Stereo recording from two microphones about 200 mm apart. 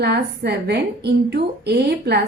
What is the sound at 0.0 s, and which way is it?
A woman's voice, 55° right (ahead or behind).